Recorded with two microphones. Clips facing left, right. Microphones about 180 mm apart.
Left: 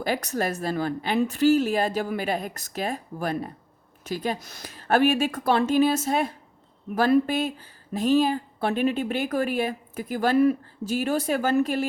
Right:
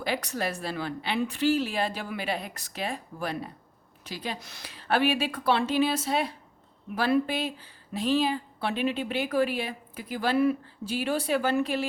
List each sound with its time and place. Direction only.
0.0 s a woman's voice: 45° left (ahead or behind)